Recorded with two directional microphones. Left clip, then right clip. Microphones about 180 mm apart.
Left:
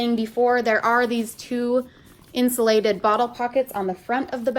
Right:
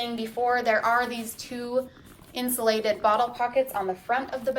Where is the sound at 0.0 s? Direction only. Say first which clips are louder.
Left 6 dB; 45° left (ahead or behind).